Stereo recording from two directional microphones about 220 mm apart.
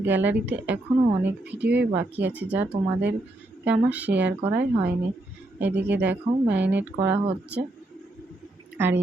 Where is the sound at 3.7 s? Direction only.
5° right (ahead or behind).